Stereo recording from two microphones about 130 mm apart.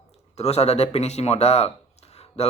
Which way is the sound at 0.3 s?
55° left (ahead or behind).